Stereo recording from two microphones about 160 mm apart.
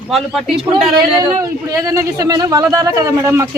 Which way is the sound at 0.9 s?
20° right (ahead or behind).